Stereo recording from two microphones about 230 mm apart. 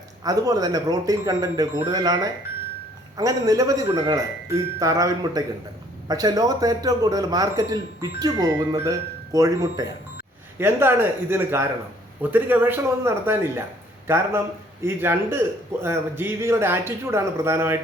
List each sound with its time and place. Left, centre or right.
0.3 s a man's voice: centre